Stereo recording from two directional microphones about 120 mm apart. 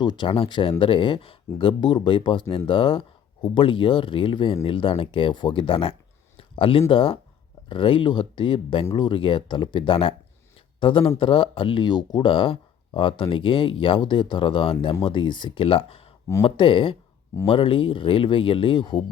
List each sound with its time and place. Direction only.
0.0 s speech: 40° left (ahead or behind)